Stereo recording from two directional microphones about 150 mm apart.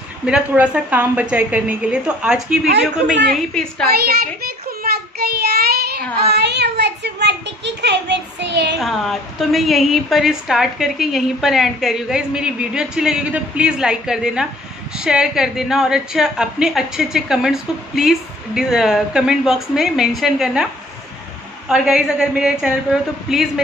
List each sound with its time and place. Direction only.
0.3 s a woman's voice: 10° right (ahead or behind)
4.4 s child singing: 90° right
6.2 s a child's voice: 90° right
8.7 s a woman's voice: centre (ahead or behind)
21.6 s a woman's voice: 5° right (ahead or behind)